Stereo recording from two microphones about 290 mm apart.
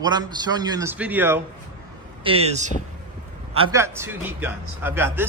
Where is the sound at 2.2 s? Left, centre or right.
Right.